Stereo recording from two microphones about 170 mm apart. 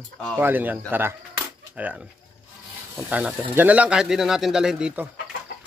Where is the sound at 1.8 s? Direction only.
10° right (ahead or behind).